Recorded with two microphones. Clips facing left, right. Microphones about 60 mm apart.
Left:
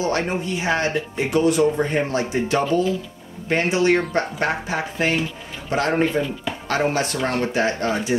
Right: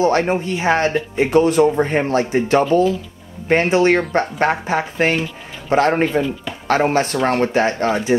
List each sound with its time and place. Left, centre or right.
0.0 s speech: right